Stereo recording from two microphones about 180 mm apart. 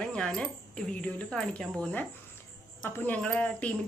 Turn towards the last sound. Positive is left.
turn(degrees=5)  # may be behind; listen again after turning